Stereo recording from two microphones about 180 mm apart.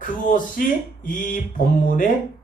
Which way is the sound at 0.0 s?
50° left (ahead or behind).